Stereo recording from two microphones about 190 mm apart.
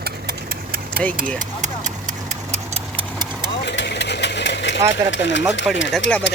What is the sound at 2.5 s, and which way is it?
Clock, 35° right (ahead or behind).